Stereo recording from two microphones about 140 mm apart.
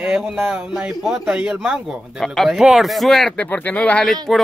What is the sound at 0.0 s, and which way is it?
Speech, 10° right (ahead or behind).